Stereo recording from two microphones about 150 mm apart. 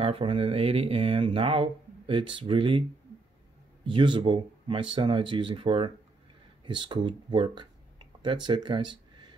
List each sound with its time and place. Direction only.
0.0 s speech: 40° right (ahead or behind)
3.8 s a man's voice: 35° right (ahead or behind)